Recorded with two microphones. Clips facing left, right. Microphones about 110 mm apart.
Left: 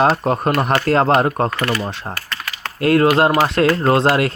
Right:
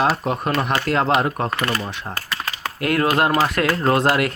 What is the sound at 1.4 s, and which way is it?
Speech, 20° right (ahead or behind).